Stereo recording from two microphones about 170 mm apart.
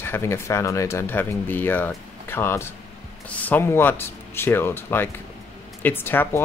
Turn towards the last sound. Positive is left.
turn(degrees=10)  # may be behind; listen again after turning